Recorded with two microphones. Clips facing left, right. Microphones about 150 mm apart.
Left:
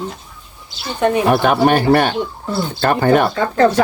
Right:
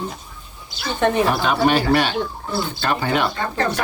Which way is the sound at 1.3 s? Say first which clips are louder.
Left 5 dB; 55° left (ahead or behind).